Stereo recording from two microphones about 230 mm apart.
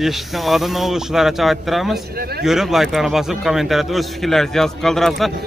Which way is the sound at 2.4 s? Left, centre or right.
Centre.